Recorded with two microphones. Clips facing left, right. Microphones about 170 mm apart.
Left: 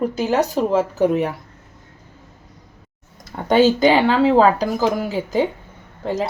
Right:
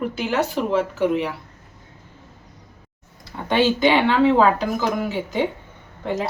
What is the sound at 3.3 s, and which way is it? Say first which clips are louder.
Speech: left 5 dB; 45° left (ahead or behind).